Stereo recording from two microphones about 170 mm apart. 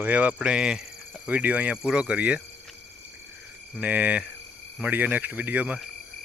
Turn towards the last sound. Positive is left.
turn(degrees=-10)  # may be behind; listen again after turning